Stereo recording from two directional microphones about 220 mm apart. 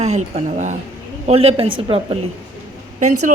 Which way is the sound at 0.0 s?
30° right (ahead or behind).